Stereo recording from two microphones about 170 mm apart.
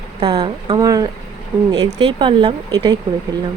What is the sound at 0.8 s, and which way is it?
Speech, 20° right (ahead or behind).